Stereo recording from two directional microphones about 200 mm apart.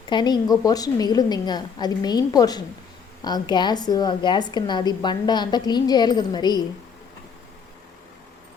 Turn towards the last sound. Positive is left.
turn(degrees=20)  # may be behind; listen again after turning